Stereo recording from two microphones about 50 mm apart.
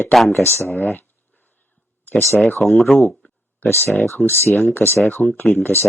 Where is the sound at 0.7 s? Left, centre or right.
Left.